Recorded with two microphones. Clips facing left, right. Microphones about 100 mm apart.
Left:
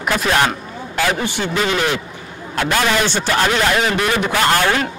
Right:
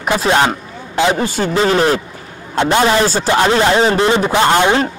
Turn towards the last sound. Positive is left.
turn(degrees=-20)  # may be behind; listen again after turning